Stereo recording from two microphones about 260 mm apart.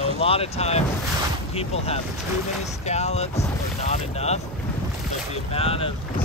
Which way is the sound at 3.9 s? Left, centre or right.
Left.